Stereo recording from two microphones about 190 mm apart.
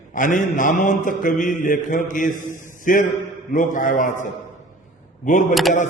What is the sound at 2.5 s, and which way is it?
Speech, 45° left (ahead or behind).